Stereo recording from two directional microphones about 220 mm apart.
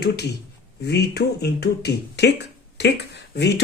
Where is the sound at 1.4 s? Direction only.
50° left (ahead or behind).